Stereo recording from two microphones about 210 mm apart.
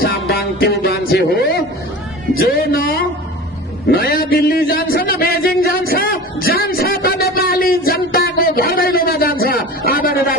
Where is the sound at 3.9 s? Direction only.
45° left (ahead or behind).